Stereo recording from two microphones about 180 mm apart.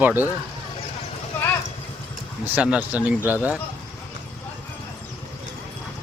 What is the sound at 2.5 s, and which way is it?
Speech, 10° right (ahead or behind).